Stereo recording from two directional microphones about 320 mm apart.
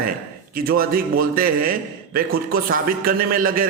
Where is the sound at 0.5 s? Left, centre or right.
Right.